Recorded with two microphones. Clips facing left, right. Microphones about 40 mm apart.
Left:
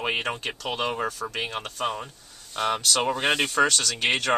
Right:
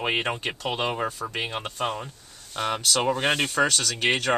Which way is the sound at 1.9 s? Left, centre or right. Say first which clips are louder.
Even; centre.